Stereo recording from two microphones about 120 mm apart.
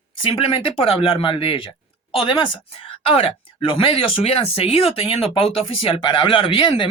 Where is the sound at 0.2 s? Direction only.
45° left (ahead or behind).